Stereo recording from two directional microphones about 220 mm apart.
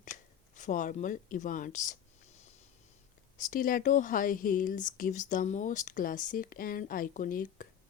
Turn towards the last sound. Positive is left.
turn(degrees=40)  # may be behind; listen again after turning